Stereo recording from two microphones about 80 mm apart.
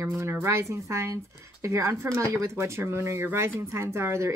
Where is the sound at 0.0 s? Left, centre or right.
Right.